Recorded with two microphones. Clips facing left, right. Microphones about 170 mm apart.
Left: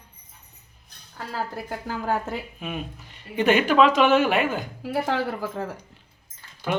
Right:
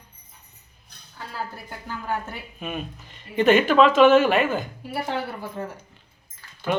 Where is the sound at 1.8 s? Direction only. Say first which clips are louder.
Left 3 dB; 90° left.